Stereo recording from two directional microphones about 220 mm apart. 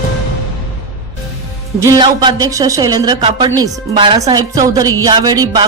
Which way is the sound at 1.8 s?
15° right (ahead or behind).